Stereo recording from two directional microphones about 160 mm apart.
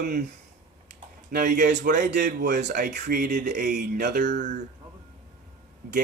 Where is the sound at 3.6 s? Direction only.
90° right.